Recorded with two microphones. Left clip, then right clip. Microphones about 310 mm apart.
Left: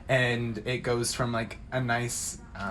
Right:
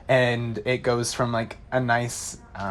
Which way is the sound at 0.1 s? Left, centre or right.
Right.